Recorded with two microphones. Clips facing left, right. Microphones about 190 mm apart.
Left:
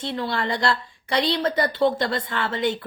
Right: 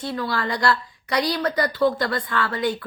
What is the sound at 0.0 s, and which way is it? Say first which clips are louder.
A woman's voice: even; 25° left (ahead or behind).